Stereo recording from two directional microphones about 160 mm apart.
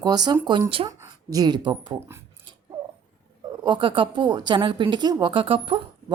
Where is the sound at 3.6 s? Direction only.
30° right (ahead or behind).